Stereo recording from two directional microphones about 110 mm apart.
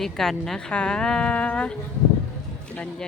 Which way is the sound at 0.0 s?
5° left (ahead or behind).